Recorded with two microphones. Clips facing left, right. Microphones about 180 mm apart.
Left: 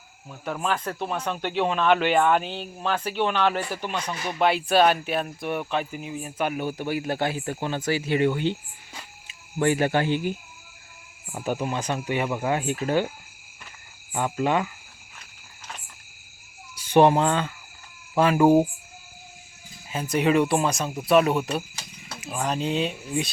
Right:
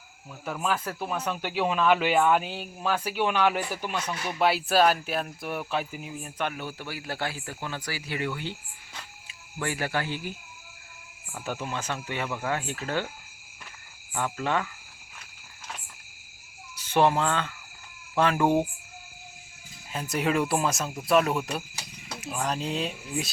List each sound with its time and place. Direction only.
0.4 s speech: 5° right (ahead or behind)
6.5 s speech: 15° left (ahead or behind)
14.1 s speech: 20° left (ahead or behind)
16.7 s speech: 15° left (ahead or behind)
19.9 s speech: centre (ahead or behind)